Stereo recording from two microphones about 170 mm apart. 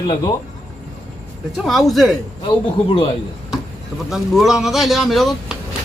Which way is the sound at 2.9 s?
30° left (ahead or behind).